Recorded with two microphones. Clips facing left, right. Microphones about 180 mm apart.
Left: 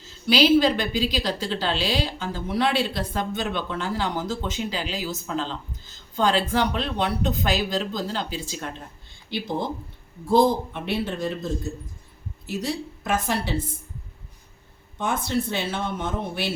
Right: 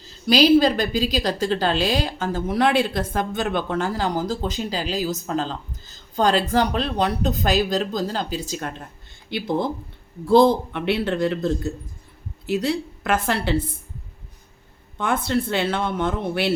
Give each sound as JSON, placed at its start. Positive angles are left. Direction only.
{"t": 0.3, "sound": "a woman's voice", "side_deg": -40}
{"t": 10.2, "sound": "speech", "side_deg": -65}
{"t": 14.9, "sound": "speech", "side_deg": -60}